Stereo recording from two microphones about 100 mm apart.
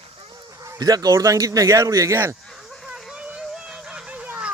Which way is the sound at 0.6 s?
40° right (ahead or behind).